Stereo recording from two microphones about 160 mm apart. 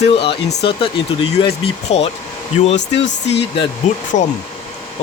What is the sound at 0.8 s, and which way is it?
Speech, 35° left (ahead or behind).